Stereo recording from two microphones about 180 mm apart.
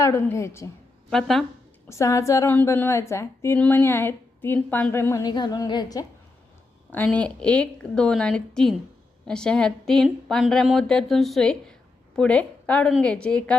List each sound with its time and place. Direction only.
0.0 s a woman's voice: 15° left (ahead or behind)
1.1 s speech: centre (ahead or behind)
1.9 s a woman's voice: 15° left (ahead or behind)
6.9 s speech: 10° left (ahead or behind)